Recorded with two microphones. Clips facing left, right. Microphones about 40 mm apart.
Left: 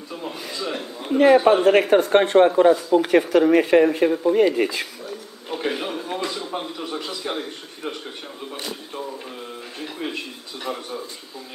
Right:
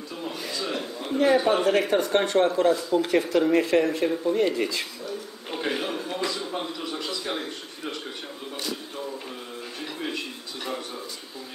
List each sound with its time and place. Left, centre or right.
0.1 s a sound: centre
1.1 s speech: left
5.6 s a man's voice: centre
6.0 s a man's voice: left
9.8 s a man's voice: centre